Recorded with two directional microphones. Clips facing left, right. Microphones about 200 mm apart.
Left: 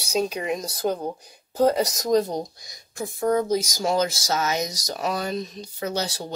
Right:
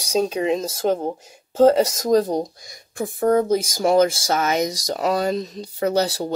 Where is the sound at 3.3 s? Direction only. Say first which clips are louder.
Right 4 dB; 55° right (ahead or behind).